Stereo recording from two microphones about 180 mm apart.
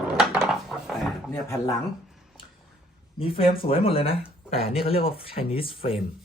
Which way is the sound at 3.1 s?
30° left (ahead or behind).